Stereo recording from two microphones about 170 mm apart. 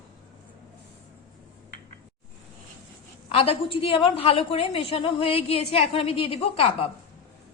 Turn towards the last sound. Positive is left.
turn(degrees=35)  # may be behind; listen again after turning